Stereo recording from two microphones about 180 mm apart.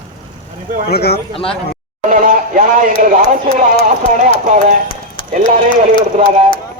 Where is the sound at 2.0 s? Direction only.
50° right (ahead or behind).